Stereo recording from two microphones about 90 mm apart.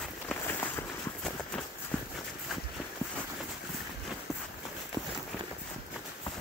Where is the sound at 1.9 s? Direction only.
15° left (ahead or behind).